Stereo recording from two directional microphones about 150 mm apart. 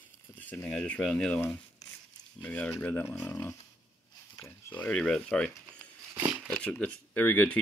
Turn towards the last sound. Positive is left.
turn(degrees=10)  # may be behind; listen again after turning